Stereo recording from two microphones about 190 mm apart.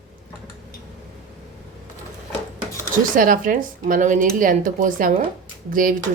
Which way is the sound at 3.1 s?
45° right (ahead or behind).